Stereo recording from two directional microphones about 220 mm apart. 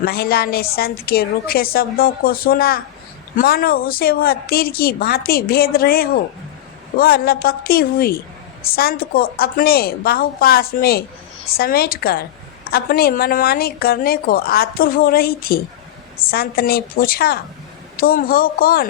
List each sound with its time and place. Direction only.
0.0 s a woman's voice: 45° left (ahead or behind)